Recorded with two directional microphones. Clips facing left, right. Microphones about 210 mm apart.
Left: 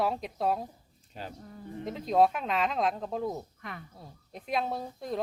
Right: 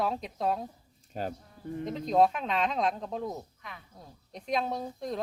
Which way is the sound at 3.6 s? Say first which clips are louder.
Left 5 dB; 55° left (ahead or behind).